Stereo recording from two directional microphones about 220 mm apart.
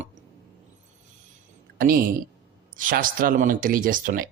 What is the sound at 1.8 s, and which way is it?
Speech, 40° right (ahead or behind).